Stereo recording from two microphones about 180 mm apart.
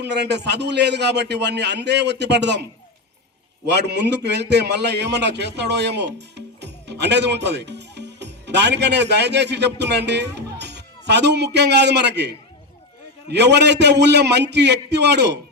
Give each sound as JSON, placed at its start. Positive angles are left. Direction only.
{"t": 0.0, "sound": "a man's voice", "side_deg": -70}
{"t": 3.7, "sound": "a man's voice", "side_deg": -70}